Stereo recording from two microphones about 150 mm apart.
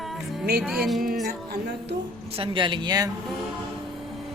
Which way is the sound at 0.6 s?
5° right (ahead or behind).